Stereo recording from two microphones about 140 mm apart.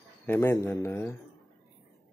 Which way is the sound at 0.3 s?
20° left (ahead or behind).